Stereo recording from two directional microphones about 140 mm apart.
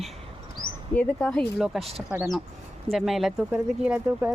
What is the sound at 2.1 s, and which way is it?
Speech, 20° right (ahead or behind).